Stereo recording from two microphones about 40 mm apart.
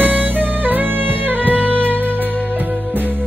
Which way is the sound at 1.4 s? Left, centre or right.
Right.